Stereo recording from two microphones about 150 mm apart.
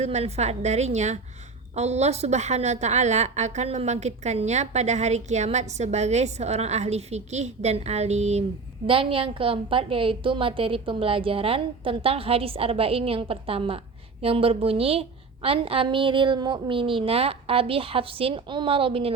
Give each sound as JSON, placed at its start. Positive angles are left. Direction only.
{"t": 0.0, "sound": "a woman's voice", "side_deg": -45}
{"t": 8.9, "sound": "a woman's voice", "side_deg": -35}